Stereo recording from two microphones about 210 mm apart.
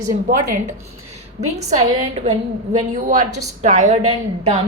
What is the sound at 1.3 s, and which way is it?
A woman's voice, 30° right (ahead or behind).